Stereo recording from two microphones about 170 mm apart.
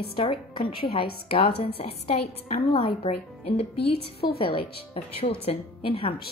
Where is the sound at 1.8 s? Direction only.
35° left (ahead or behind).